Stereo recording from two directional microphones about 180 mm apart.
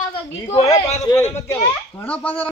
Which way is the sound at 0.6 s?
35° left (ahead or behind).